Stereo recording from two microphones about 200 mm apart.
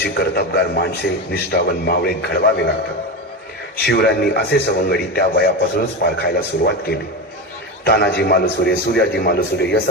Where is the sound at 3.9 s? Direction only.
55° left (ahead or behind).